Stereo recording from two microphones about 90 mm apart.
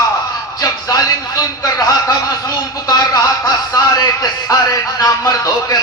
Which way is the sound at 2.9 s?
45° left (ahead or behind).